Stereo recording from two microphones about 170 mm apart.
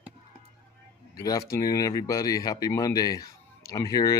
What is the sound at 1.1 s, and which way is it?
Speech, 20° left (ahead or behind).